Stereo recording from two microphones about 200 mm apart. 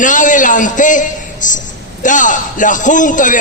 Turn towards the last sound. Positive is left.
turn(degrees=40)  # may be behind; listen again after turning